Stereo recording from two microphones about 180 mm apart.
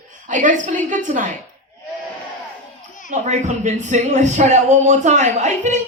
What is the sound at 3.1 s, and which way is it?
Speech, 40° right (ahead or behind).